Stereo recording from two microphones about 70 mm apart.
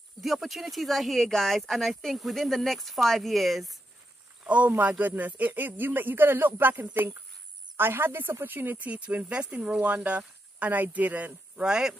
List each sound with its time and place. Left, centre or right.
0.2 s speech: centre
4.5 s speech: right
11.6 s speech: centre